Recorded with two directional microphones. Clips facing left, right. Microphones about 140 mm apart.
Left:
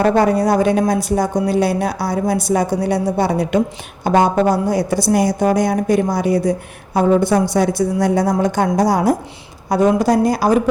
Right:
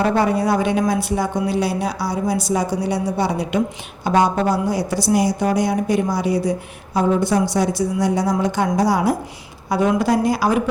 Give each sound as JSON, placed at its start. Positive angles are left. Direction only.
{"t": 0.0, "sound": "a woman's voice", "side_deg": 45}